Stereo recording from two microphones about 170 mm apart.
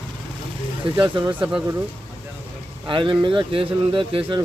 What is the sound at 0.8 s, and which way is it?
Speech, 30° right (ahead or behind).